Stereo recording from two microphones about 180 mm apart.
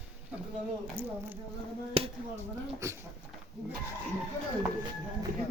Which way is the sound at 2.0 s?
30° right (ahead or behind).